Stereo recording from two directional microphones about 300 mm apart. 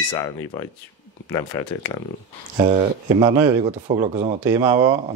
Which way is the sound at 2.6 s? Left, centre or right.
Right.